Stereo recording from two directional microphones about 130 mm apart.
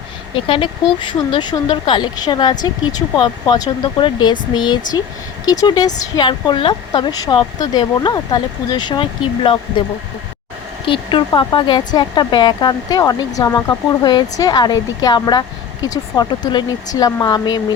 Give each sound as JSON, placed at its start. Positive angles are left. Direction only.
{"t": 0.3, "sound": "speech", "side_deg": 45}
{"t": 10.8, "sound": "speech", "side_deg": 40}